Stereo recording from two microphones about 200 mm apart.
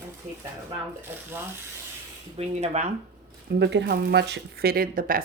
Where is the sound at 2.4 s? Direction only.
30° right (ahead or behind).